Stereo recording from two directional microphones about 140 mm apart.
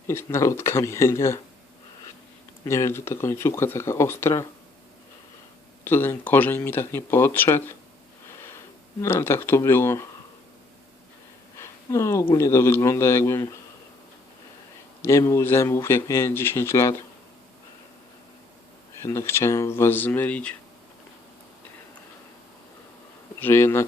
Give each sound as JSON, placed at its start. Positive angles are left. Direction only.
{"t": 0.1, "sound": "speech", "side_deg": 20}
{"t": 2.6, "sound": "speech", "side_deg": 20}
{"t": 5.8, "sound": "speech", "side_deg": 15}
{"t": 11.5, "sound": "a sound", "side_deg": 20}
{"t": 12.4, "sound": "speech", "side_deg": 20}
{"t": 15.0, "sound": "speech", "side_deg": 20}
{"t": 19.0, "sound": "speech", "side_deg": 20}
{"t": 23.4, "sound": "speech", "side_deg": 15}